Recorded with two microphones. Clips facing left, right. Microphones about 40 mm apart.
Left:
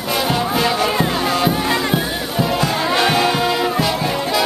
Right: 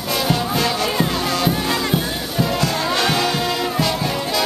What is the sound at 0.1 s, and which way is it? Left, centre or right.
Music, centre.